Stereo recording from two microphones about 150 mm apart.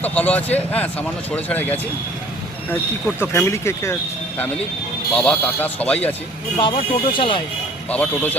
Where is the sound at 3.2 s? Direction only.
15° left (ahead or behind).